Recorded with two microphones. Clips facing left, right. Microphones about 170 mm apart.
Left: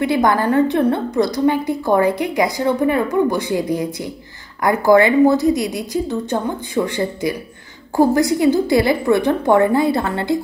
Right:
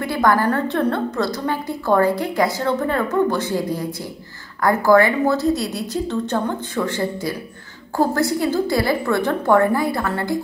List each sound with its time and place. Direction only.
0.0 s a woman's voice: 20° left (ahead or behind)